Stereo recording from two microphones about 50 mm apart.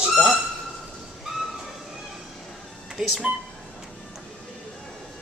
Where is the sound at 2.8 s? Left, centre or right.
Centre.